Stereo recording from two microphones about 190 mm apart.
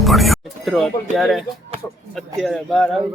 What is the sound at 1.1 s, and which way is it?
Speech, centre (ahead or behind).